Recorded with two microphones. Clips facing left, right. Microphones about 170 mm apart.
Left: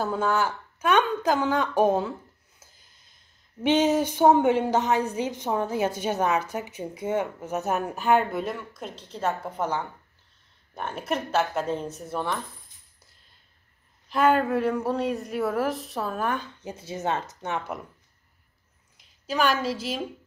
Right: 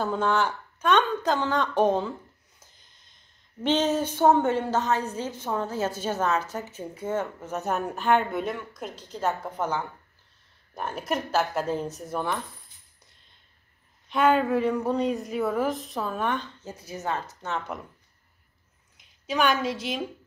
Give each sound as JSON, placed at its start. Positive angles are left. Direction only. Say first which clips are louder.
{"t": 0.0, "sound": "a woman's voice", "louder": "even", "side_deg": 5}
{"t": 2.6, "sound": "a sound", "louder": "left 2 dB", "side_deg": 5}
{"t": 3.6, "sound": "a woman's voice", "louder": "left 3 dB", "side_deg": 10}
{"t": 14.0, "sound": "speech", "louder": "even", "side_deg": 0}
{"t": 16.6, "sound": "speech", "louder": "left 3 dB", "side_deg": 20}
{"t": 18.9, "sound": "a woman's voice", "louder": "even", "side_deg": 0}